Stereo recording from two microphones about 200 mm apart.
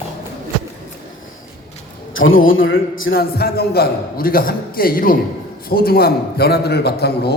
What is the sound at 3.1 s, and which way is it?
A man's voice, 50° left (ahead or behind).